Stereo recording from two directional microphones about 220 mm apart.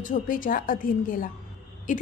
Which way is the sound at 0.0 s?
35° left (ahead or behind).